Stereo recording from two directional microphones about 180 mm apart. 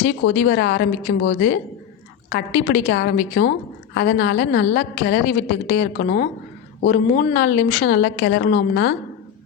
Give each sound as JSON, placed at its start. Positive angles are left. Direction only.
{"t": 0.3, "sound": "a woman's voice", "side_deg": 70}